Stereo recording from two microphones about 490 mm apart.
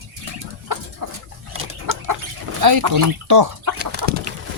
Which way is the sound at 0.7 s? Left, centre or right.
Right.